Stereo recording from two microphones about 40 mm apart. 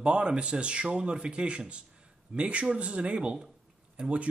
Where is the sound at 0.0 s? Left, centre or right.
Right.